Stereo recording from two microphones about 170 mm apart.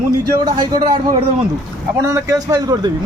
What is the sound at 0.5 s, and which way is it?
Speech, 25° right (ahead or behind).